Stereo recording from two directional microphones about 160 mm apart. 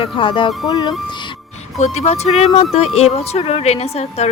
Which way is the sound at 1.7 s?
40° left (ahead or behind).